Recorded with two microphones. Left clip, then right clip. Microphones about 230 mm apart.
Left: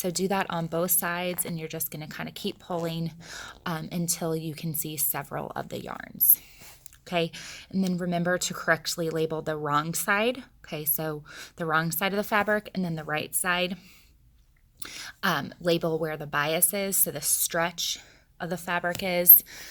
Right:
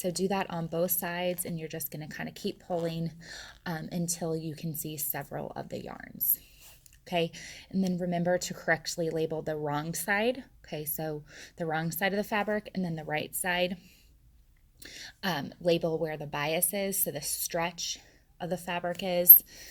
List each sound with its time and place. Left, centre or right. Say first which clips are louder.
0.0 s a woman's voice: left 3 dB; left
14.8 s a woman's voice: left 6 dB; left